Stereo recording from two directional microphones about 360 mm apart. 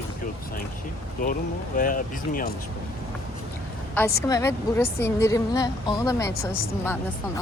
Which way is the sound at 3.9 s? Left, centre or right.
Centre.